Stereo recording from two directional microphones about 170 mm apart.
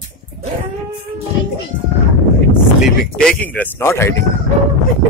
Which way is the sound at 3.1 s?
5° left (ahead or behind).